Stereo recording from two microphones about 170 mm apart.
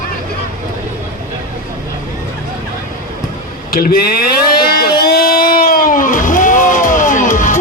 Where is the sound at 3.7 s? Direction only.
65° left (ahead or behind).